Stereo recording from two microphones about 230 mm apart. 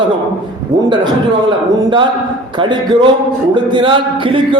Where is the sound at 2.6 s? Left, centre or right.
Centre.